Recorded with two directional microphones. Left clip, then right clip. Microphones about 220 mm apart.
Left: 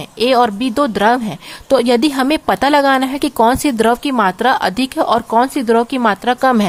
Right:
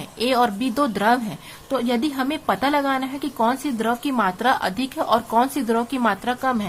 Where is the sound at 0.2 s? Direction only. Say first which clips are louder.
Left 7 dB; 30° left (ahead or behind).